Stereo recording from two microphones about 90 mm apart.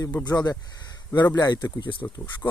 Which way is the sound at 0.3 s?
45° left (ahead or behind).